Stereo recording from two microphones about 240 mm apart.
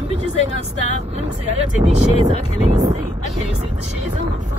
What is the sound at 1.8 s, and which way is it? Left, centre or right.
Speech, right.